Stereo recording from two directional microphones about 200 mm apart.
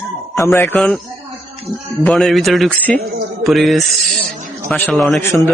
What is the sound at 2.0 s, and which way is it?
A man's voice, centre (ahead or behind).